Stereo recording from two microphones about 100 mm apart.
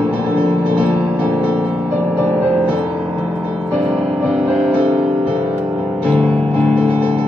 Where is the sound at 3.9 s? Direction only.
Centre (ahead or behind).